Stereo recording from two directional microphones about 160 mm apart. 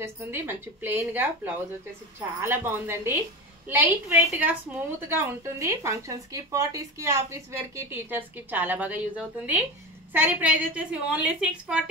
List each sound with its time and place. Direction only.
0.0 s speech: 15° right (ahead or behind)